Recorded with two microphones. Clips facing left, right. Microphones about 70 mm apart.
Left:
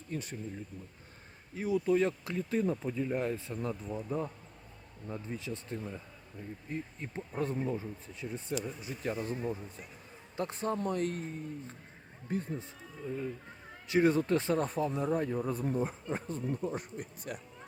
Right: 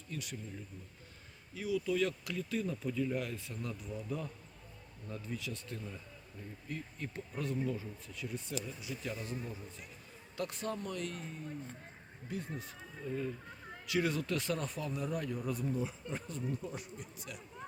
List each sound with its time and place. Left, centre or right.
0.1 s speech: left
1.5 s speech: left
10.3 s speech: left
12.3 s speech: left
13.0 s speech: centre
13.8 s speech: left
16.0 s speech: left